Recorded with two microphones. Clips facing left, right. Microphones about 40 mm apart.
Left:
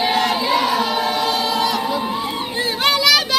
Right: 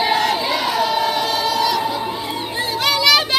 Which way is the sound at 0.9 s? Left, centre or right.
Left.